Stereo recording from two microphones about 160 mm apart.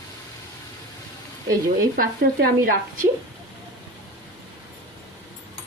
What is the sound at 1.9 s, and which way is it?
Speech, 65° right (ahead or behind).